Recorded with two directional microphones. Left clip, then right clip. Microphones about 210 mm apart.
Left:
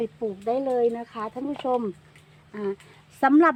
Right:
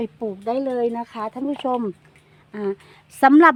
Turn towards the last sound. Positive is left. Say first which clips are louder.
# right 6 dB
turn(degrees=-45)  # may be behind; listen again after turning